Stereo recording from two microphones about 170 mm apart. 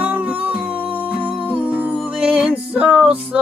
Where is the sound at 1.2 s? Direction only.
30° right (ahead or behind).